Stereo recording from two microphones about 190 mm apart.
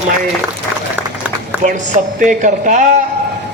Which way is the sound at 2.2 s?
45° right (ahead or behind).